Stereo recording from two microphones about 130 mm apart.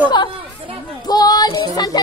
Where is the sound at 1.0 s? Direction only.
30° left (ahead or behind).